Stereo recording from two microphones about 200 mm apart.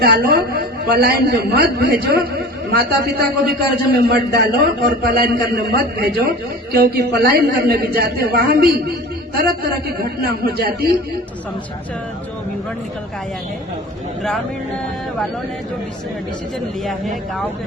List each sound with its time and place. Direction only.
0.0 s a man's voice: 50° right (ahead or behind)